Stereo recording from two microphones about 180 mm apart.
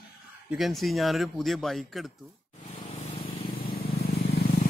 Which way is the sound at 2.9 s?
30° left (ahead or behind).